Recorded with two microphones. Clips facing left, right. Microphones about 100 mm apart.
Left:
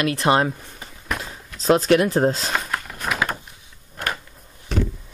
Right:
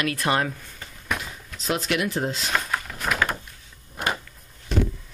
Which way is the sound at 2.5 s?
Centre (ahead or behind).